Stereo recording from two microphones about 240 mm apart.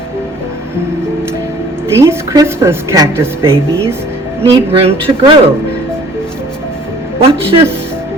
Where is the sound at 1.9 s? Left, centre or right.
Centre.